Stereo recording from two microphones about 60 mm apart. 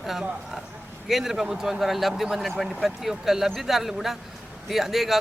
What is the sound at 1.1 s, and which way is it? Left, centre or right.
Speech, centre.